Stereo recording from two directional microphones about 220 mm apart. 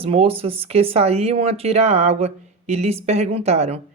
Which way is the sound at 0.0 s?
25° right (ahead or behind).